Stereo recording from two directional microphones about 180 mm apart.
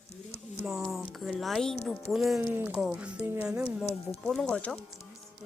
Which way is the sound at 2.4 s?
10° right (ahead or behind).